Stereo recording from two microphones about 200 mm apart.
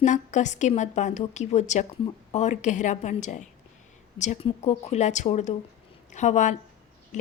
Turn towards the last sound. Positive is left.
turn(degrees=35)  # may be behind; listen again after turning